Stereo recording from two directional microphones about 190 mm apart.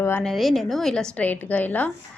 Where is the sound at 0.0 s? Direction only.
10° left (ahead or behind).